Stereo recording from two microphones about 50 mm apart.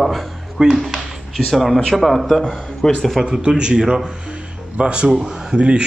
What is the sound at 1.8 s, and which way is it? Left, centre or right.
A man's voice, centre.